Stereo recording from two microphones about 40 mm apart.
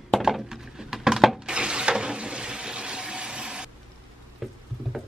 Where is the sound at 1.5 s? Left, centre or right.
Right.